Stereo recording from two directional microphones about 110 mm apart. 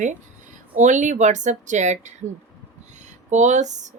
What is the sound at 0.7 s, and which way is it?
A woman's voice, 90° right.